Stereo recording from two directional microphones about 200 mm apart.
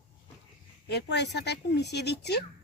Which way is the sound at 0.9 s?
55° left (ahead or behind).